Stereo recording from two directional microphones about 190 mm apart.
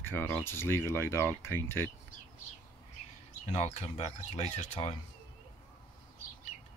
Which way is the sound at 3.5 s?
35° left (ahead or behind).